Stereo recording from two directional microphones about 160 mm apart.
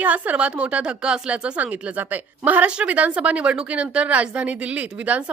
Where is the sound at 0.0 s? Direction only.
10° right (ahead or behind).